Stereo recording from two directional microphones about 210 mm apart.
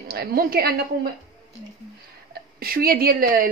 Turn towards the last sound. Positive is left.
turn(degrees=-45)  # may be behind; listen again after turning